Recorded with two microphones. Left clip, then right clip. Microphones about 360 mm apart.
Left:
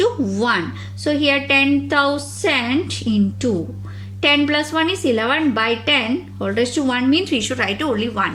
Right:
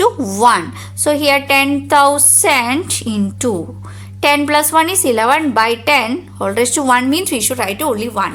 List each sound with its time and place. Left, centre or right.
0.3 s a woman's voice: centre